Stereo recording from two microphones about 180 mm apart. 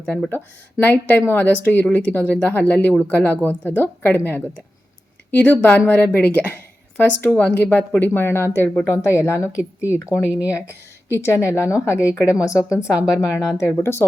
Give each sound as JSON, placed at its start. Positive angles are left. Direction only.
{"t": 0.0, "sound": "speech", "side_deg": 10}
{"t": 9.6, "sound": "speech", "side_deg": -10}
{"t": 11.4, "sound": "speech", "side_deg": 15}
{"t": 12.2, "sound": "a woman's voice", "side_deg": -5}
{"t": 13.5, "sound": "speech", "side_deg": 15}